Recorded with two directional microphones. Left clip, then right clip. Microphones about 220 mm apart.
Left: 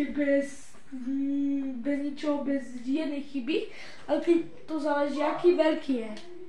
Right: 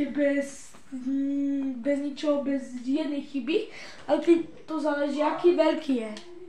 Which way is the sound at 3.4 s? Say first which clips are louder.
Right 3 dB; 45° right (ahead or behind).